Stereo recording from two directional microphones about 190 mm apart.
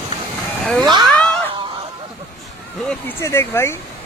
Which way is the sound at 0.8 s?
20° right (ahead or behind).